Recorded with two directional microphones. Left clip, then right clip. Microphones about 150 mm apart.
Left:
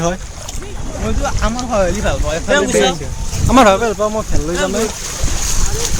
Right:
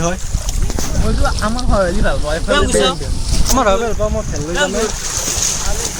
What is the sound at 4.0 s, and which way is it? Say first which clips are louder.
Speech: left 2 dB; 45° left (ahead or behind).